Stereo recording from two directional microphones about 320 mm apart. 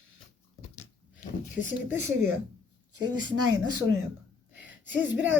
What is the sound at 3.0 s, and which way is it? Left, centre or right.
Speech, right.